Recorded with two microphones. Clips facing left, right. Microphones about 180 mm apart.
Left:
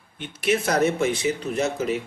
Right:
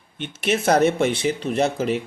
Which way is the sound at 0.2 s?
25° right (ahead or behind).